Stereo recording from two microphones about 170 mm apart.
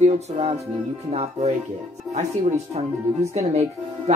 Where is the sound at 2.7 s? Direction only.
40° right (ahead or behind).